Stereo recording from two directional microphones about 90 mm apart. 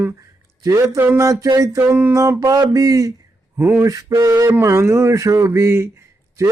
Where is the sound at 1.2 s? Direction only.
40° right (ahead or behind).